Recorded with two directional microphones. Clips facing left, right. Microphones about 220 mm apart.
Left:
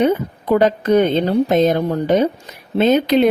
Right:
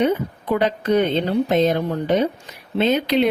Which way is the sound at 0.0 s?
45° left (ahead or behind).